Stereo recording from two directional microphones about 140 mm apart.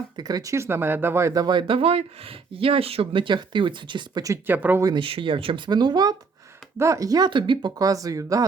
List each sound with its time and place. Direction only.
0.2 s speech: 30° right (ahead or behind)
4.4 s speech: 15° right (ahead or behind)
4.8 s speech: 25° right (ahead or behind)
5.0 s speech: 40° right (ahead or behind)